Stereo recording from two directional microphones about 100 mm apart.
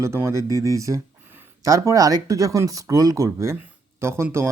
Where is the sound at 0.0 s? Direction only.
30° right (ahead or behind).